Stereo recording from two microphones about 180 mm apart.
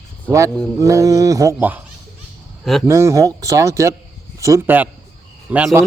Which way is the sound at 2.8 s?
15° right (ahead or behind).